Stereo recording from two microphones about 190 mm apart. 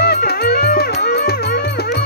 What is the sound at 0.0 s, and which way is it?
Music, 55° left (ahead or behind).